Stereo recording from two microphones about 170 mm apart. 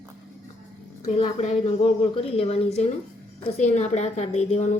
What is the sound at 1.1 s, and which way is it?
A woman's voice, 35° left (ahead or behind).